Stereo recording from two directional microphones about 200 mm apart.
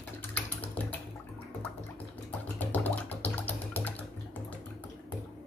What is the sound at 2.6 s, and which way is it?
Music, 10° left (ahead or behind).